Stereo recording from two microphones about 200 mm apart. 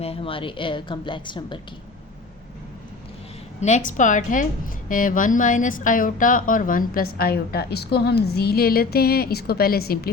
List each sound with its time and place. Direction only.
0.0 s a woman's voice: 30° left (ahead or behind)
3.6 s a woman's voice: 35° left (ahead or behind)